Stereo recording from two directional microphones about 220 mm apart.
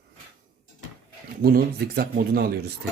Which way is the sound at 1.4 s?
45° right (ahead or behind).